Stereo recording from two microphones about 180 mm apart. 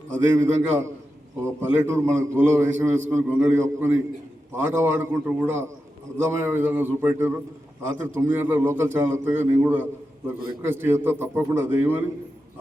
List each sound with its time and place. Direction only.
0.3 s a man's voice: 15° right (ahead or behind)